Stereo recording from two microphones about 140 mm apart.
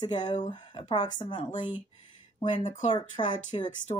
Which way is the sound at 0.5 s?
35° left (ahead or behind).